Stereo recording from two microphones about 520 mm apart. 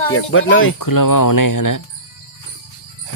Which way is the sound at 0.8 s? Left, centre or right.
Left.